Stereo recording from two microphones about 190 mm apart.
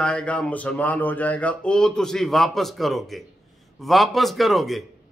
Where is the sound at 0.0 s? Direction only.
5° left (ahead or behind).